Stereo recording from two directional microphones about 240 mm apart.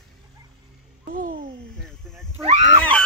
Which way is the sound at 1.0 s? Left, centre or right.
Right.